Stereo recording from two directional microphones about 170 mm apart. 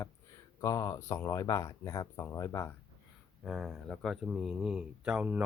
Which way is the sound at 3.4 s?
Centre (ahead or behind).